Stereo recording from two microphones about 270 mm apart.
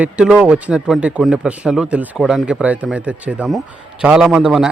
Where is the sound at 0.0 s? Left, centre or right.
Centre.